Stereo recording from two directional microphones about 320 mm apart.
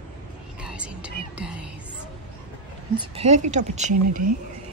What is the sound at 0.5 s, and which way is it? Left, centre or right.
Whispering, centre.